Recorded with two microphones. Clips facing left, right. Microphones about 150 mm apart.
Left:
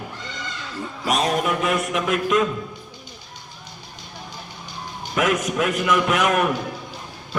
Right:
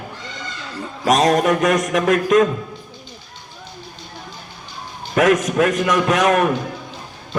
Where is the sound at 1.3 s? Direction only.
45° right (ahead or behind).